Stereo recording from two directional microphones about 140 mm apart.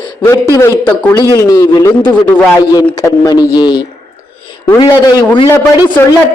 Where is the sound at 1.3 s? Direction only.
25° left (ahead or behind).